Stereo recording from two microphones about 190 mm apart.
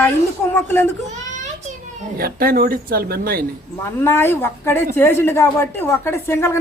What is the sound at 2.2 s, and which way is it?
Speech, 50° right (ahead or behind).